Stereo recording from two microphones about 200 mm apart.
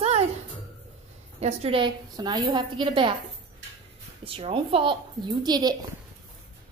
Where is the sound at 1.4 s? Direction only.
30° right (ahead or behind).